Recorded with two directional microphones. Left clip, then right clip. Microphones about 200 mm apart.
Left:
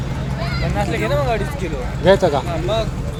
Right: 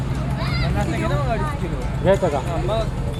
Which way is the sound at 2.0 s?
20° left (ahead or behind).